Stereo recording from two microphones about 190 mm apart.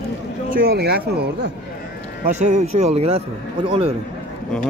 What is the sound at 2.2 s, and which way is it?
A man's voice, 40° right (ahead or behind).